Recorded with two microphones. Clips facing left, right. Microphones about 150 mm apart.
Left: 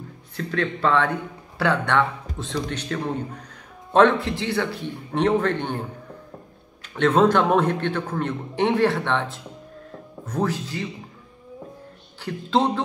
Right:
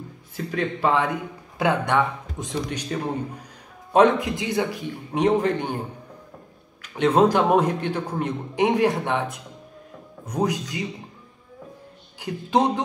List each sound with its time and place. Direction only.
0.4 s a man's voice: 10° right (ahead or behind)
7.2 s a man's voice: 10° right (ahead or behind)
12.2 s a man's voice: 15° right (ahead or behind)